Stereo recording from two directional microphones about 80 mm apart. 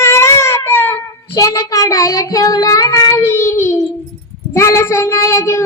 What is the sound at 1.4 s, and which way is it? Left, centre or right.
Child singing, left.